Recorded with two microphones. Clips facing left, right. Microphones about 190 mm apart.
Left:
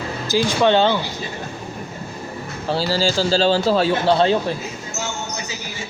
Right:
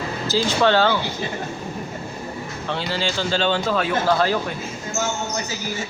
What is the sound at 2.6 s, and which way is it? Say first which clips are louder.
A man's voice: left 6 dB; 35° left (ahead or behind).